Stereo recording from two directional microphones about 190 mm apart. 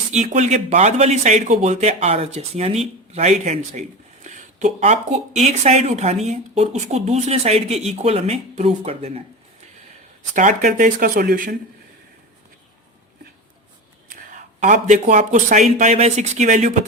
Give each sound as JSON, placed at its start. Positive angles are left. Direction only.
{"t": 0.1, "sound": "speech", "side_deg": -40}
{"t": 10.3, "sound": "speech", "side_deg": -40}
{"t": 14.1, "sound": "a man's voice", "side_deg": -45}